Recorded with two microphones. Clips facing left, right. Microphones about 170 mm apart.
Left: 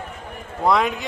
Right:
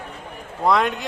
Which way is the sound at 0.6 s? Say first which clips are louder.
Even; centre (ahead or behind).